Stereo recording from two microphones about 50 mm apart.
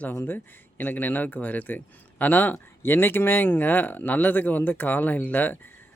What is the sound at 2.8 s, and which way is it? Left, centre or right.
Speech, left.